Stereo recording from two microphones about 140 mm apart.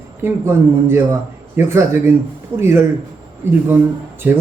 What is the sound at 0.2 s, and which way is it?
A man's voice, 15° right (ahead or behind).